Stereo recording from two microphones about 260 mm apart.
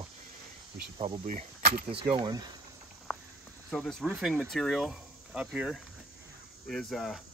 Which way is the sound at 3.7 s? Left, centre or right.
Centre.